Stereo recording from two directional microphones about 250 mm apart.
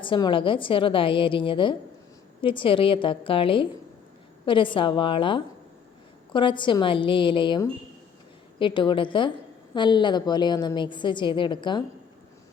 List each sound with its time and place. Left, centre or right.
0.0 s a woman's voice: centre